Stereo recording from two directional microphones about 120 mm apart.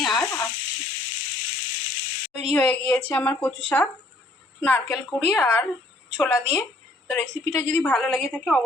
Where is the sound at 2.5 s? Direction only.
10° left (ahead or behind).